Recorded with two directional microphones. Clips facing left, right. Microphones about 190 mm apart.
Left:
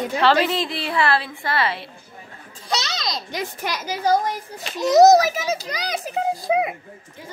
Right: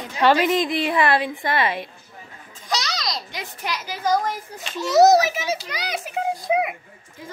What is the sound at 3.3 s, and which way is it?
Speech, 45° left (ahead or behind).